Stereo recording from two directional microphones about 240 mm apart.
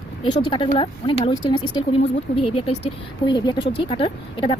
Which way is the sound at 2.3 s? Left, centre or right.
Left.